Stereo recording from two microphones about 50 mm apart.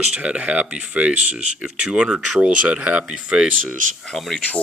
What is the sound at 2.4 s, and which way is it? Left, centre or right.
Speech, centre.